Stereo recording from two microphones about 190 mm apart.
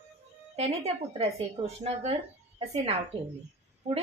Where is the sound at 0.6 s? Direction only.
35° right (ahead or behind).